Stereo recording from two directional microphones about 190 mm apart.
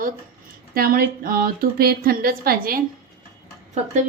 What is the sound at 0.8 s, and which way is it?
A woman's voice, 50° right (ahead or behind).